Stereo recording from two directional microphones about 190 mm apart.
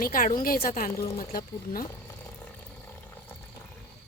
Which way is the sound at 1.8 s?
15° left (ahead or behind).